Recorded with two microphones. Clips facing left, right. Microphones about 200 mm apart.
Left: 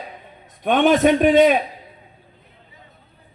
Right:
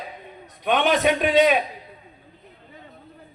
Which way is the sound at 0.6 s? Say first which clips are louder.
Left 5 dB; 50° left (ahead or behind).